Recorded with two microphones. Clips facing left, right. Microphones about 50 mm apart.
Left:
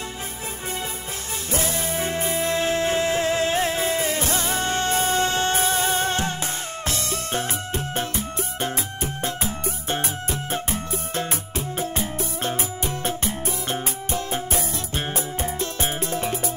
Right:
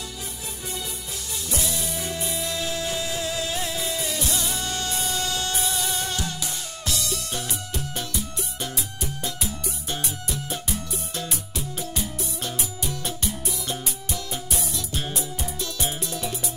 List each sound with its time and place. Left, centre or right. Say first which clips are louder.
1.5 s music: left 5 dB; left